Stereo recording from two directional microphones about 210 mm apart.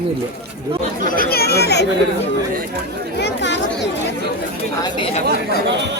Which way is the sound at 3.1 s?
55° left (ahead or behind).